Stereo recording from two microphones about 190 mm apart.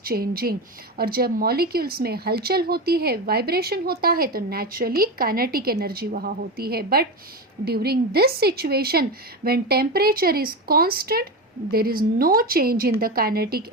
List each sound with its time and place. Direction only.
0.0 s speech: 50° right (ahead or behind)